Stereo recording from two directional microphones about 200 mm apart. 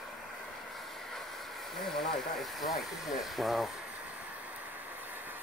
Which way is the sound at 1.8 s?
Centre (ahead or behind).